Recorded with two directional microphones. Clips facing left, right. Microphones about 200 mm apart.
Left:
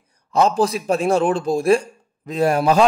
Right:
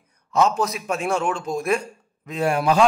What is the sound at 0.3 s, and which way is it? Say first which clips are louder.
A man's voice: left 3 dB; 35° left (ahead or behind).